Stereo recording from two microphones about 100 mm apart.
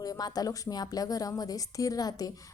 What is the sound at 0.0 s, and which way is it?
Speech, 40° left (ahead or behind).